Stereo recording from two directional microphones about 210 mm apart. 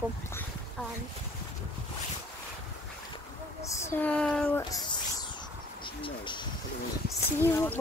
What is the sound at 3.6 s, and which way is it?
Speech, 15° left (ahead or behind).